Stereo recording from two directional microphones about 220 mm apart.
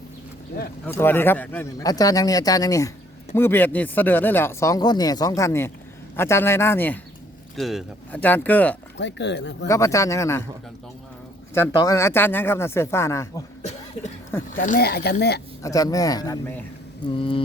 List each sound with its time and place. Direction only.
0.9 s speech: 10° left (ahead or behind)
9.0 s speech: 55° left (ahead or behind)
9.6 s speech: 15° left (ahead or behind)
11.5 s speech: 15° left (ahead or behind)
14.5 s speech: 40° left (ahead or behind)
15.6 s speech: 15° left (ahead or behind)
17.2 s mantra: 25° left (ahead or behind)